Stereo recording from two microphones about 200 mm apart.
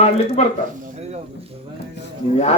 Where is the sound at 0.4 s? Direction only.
35° left (ahead or behind).